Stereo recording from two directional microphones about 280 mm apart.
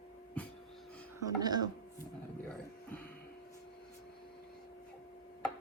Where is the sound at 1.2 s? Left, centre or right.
Centre.